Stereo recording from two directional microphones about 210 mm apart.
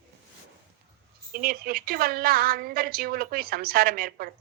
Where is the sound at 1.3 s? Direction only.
45° right (ahead or behind).